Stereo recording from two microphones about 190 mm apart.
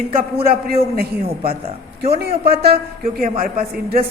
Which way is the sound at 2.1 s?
55° right (ahead or behind).